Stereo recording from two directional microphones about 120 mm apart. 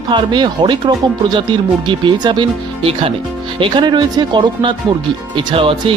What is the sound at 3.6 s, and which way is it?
Speech, 40° right (ahead or behind).